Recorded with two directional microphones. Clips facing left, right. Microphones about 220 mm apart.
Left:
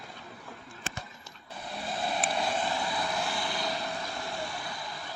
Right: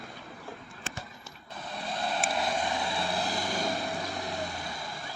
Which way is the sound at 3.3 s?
45° right (ahead or behind).